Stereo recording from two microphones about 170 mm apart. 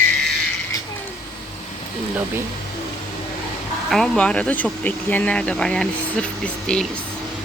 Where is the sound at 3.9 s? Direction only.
Centre (ahead or behind).